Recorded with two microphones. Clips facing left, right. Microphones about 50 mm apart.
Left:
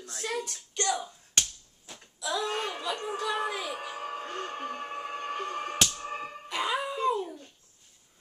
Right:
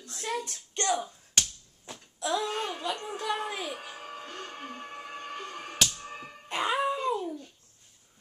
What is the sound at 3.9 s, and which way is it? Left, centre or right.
Music, centre.